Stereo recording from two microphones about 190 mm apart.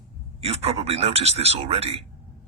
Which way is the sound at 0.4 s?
30° right (ahead or behind).